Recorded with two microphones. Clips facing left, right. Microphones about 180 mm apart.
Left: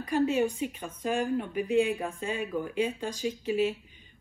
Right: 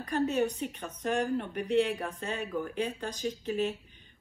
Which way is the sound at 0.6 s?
5° left (ahead or behind).